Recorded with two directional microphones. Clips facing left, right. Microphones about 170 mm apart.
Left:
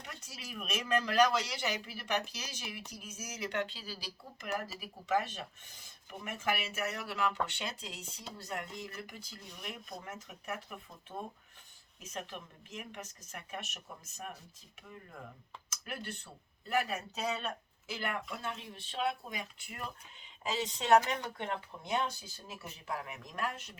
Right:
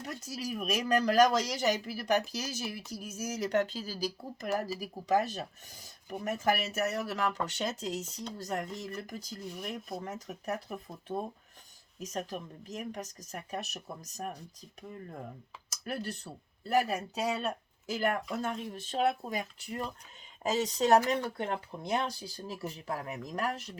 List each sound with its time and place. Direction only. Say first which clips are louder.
0.0 s speech: right 11 dB; 40° right (ahead or behind)
15.7 s speech: right 6 dB; 40° right (ahead or behind)